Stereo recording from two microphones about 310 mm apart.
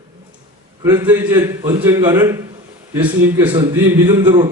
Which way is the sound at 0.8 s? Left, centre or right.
Centre.